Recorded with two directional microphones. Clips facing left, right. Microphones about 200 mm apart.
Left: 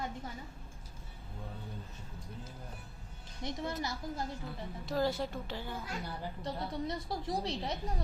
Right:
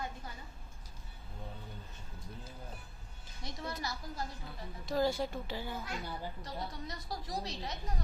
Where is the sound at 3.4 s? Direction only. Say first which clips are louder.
Left 4 dB; 20° left (ahead or behind).